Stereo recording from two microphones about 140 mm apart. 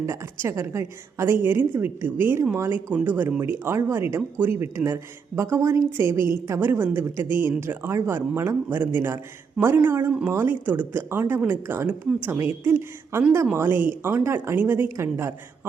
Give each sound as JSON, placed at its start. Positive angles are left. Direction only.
{"t": 0.0, "sound": "a woman's voice", "side_deg": -20}